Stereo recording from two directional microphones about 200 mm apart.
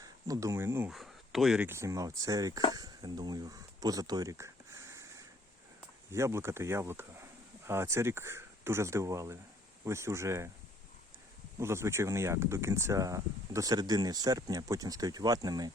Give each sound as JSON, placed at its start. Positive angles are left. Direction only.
{"t": 0.0, "sound": "speech", "side_deg": -15}
{"t": 0.9, "sound": "speech", "side_deg": 0}
{"t": 6.1, "sound": "speech", "side_deg": -15}
{"t": 11.6, "sound": "speech", "side_deg": -15}